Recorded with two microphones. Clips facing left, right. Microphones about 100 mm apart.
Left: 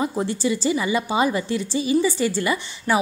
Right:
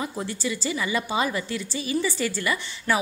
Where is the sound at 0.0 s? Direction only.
25° left (ahead or behind).